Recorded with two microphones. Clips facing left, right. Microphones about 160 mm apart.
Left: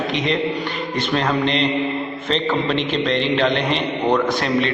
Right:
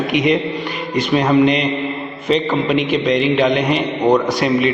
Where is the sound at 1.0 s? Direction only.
10° right (ahead or behind).